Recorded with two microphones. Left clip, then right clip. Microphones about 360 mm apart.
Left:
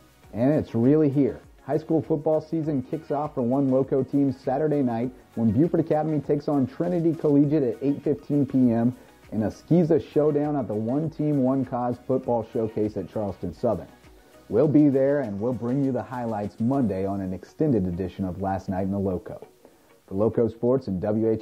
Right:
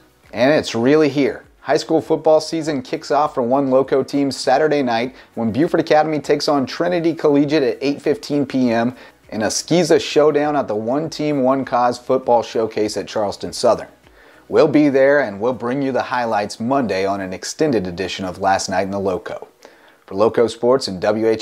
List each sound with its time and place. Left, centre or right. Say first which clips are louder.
0.3 s speech: right 9 dB; centre
1.9 s speech: right 9 dB; right
2.4 s speech: right 6 dB; centre
12.4 s speech: right 8 dB; centre